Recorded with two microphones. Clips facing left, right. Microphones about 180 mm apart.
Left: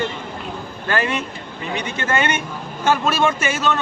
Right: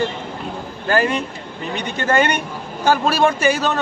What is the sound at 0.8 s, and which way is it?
Speech, 40° right (ahead or behind).